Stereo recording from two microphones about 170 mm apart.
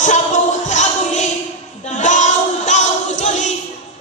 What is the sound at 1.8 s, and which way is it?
Child singing, 45° left (ahead or behind).